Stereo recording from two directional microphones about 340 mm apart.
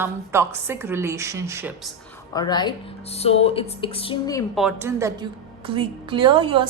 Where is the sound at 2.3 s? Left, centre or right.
Centre.